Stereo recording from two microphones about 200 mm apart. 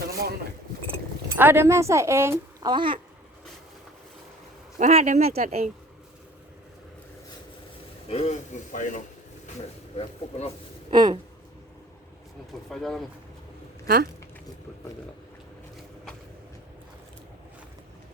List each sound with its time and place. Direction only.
1.4 s a woman's voice: 10° right (ahead or behind)
4.8 s speech: 35° right (ahead or behind)
8.0 s a man's voice: 30° left (ahead or behind)
10.0 s speech: 30° left (ahead or behind)
10.9 s speech: 20° right (ahead or behind)
12.7 s speech: centre (ahead or behind)
13.8 s speech: 50° right (ahead or behind)